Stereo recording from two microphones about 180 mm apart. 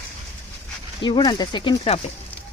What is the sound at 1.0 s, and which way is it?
Speech, 25° left (ahead or behind).